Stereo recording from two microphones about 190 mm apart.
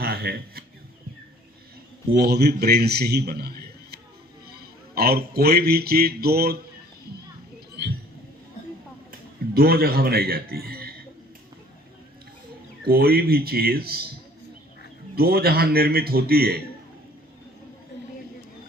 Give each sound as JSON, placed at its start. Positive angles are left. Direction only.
{"t": 0.0, "sound": "a sound", "side_deg": -55}
{"t": 2.1, "sound": "a man's voice", "side_deg": -60}
{"t": 9.6, "sound": "a man's voice", "side_deg": -55}
{"t": 12.9, "sound": "a man's voice", "side_deg": -55}
{"t": 15.1, "sound": "a man's voice", "side_deg": -55}